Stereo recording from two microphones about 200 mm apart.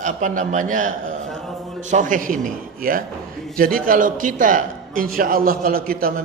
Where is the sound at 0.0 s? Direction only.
40° right (ahead or behind).